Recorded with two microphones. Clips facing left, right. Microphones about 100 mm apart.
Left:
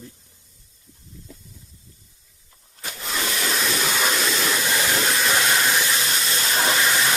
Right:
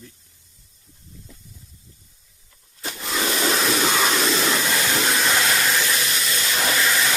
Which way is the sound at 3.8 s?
5° right (ahead or behind).